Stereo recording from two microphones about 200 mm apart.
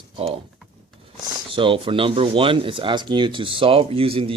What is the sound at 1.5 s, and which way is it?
Speech, 25° right (ahead or behind).